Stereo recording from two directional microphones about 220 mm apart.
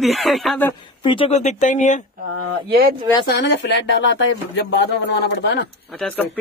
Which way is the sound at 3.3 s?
55° left (ahead or behind).